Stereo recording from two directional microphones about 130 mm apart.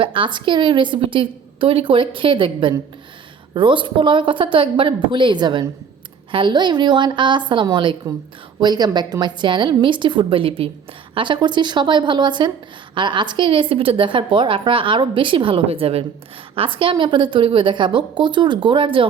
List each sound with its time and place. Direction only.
0.0 s a woman's voice: 40° right (ahead or behind)